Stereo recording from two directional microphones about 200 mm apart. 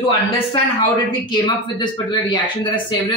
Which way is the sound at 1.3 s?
20° left (ahead or behind).